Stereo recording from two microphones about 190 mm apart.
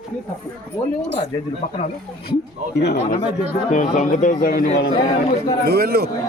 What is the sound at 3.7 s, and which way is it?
A man's voice, 40° left (ahead or behind).